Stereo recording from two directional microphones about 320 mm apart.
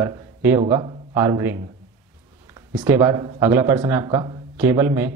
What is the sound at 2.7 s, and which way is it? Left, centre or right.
Speech, centre.